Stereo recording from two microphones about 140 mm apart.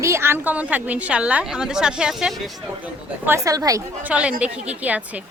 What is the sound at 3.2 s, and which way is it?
Speech, 20° right (ahead or behind).